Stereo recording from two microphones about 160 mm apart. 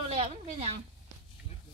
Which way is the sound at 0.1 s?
40° right (ahead or behind).